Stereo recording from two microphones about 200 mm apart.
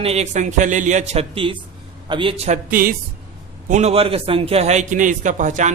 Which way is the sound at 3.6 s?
35° right (ahead or behind).